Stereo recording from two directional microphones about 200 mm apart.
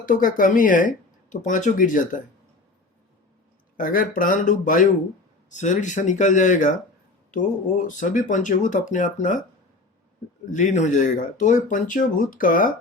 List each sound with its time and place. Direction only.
0.0 s speech: 45° left (ahead or behind)
3.8 s speech: 40° left (ahead or behind)
10.5 s speech: 40° left (ahead or behind)